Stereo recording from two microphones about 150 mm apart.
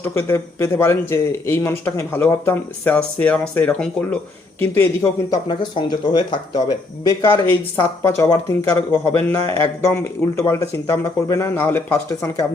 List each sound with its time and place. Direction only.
0.0 s speech: 15° left (ahead or behind)
5.3 s speech: 30° left (ahead or behind)